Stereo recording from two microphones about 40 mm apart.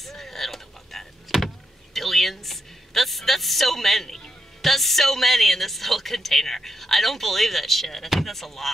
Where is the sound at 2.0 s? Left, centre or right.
Centre.